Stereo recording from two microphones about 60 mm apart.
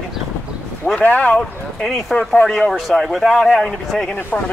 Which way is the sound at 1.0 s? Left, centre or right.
Left.